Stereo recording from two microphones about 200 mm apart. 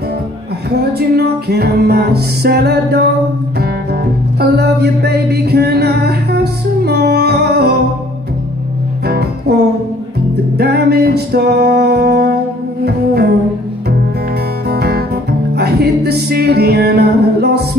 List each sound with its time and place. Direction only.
0.7 s music: 55° right (ahead or behind)
4.4 s music: 55° right (ahead or behind)
9.0 s music: 55° right (ahead or behind)
10.6 s music: 55° right (ahead or behind)
14.7 s music: 55° right (ahead or behind)